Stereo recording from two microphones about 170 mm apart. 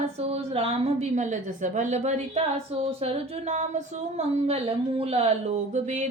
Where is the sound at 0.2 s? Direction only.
35° right (ahead or behind).